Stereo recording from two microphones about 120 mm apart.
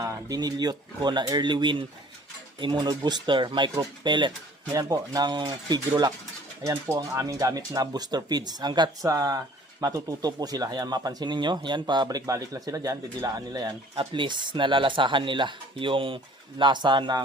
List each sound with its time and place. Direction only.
0.0 s speech: 30° right (ahead or behind)